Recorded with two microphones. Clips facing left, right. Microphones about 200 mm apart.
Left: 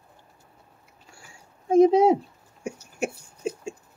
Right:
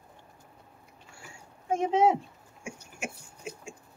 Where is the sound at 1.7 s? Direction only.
40° left (ahead or behind).